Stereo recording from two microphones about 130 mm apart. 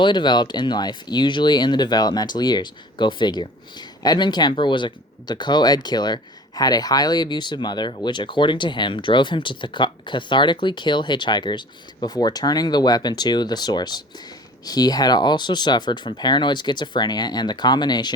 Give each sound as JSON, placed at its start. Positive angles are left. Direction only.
{"t": 0.0, "sound": "speech", "side_deg": 35}